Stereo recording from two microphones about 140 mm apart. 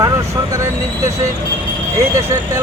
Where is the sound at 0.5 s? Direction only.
20° right (ahead or behind).